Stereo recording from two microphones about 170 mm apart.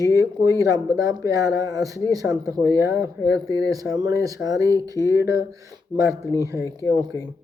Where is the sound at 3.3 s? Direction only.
90° left.